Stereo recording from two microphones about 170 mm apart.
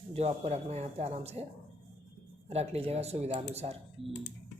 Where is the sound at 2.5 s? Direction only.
40° right (ahead or behind).